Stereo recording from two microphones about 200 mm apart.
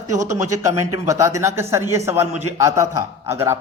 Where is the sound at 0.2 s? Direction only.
15° right (ahead or behind).